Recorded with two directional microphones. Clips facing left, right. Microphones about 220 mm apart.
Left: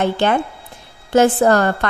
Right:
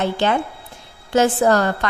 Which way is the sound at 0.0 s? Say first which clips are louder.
Left 2 dB; 55° left (ahead or behind).